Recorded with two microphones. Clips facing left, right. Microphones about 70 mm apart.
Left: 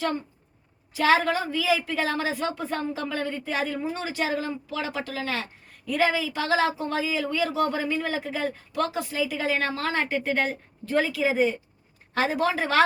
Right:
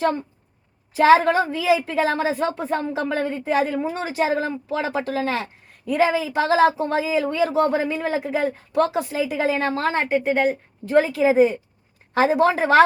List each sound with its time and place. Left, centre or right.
0.9 s speech: right
10.9 s speech: right